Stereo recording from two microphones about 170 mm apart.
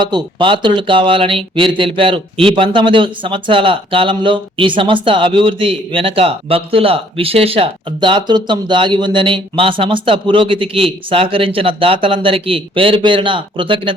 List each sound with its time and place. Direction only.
0.0 s speech: 25° right (ahead or behind)